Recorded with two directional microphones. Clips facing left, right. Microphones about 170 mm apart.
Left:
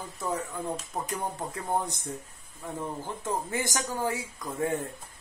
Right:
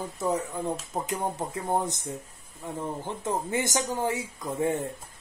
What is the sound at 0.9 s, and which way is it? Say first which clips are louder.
Speech: right 3 dB; 20° right (ahead or behind).